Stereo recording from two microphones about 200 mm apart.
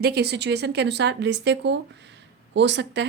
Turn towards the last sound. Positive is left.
turn(degrees=-60)  # may be behind; listen again after turning